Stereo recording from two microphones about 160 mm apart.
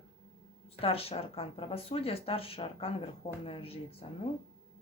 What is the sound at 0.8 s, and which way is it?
Speech, 35° left (ahead or behind).